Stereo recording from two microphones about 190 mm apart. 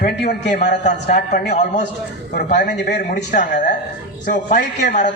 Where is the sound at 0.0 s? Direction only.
50° left (ahead or behind).